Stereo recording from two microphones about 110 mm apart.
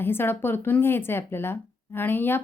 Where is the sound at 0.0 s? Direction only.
20° left (ahead or behind).